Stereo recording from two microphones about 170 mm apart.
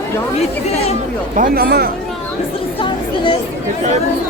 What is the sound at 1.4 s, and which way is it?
Speech, 60° right (ahead or behind).